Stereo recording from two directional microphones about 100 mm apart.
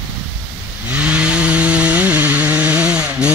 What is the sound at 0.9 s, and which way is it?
Chainsaw, 15° right (ahead or behind).